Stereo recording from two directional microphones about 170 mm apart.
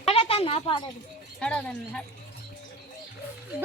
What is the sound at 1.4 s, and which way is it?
Speech, 5° left (ahead or behind).